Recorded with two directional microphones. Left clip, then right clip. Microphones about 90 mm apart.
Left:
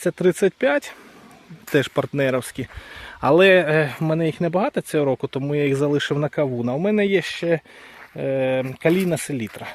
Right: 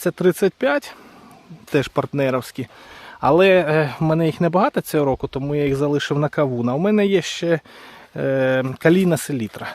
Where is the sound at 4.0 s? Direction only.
35° right (ahead or behind).